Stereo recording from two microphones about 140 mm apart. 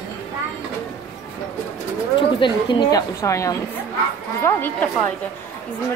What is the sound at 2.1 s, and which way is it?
Speech, 35° left (ahead or behind).